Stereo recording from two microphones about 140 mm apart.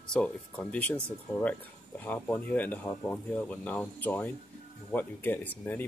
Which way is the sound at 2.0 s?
10° left (ahead or behind).